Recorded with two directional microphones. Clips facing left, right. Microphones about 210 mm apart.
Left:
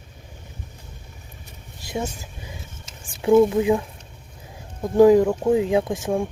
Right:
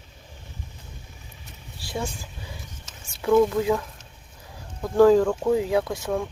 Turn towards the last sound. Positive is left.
turn(degrees=20)  # may be behind; listen again after turning